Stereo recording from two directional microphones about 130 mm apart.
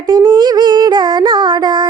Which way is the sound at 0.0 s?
35° right (ahead or behind).